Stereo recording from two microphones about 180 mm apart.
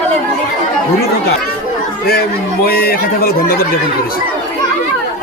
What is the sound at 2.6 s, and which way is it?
Speech, 60° left (ahead or behind).